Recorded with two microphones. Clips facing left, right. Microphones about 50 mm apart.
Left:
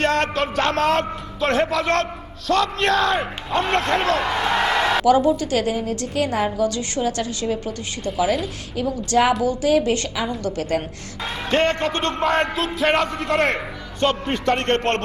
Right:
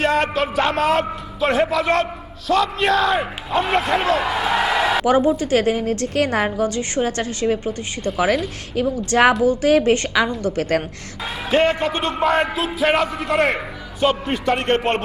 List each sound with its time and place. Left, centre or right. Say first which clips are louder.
0.0 s speech: right 1 dB; centre
5.0 s a woman's voice: even; right
6.7 s a woman's voice: right 2 dB; right
8.1 s speech: right 2 dB; right
8.7 s a woman's voice: right 1 dB; right
11.2 s speech: right 2 dB; centre